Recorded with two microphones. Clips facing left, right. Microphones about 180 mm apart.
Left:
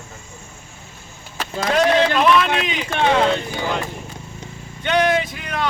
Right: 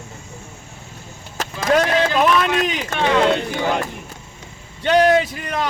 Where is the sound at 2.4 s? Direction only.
45° right (ahead or behind).